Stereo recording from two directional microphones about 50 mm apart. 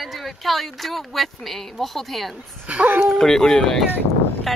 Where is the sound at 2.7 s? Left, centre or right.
Right.